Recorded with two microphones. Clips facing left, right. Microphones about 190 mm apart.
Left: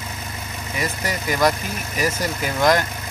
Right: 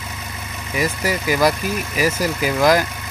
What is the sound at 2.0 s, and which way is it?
Speech, 10° right (ahead or behind).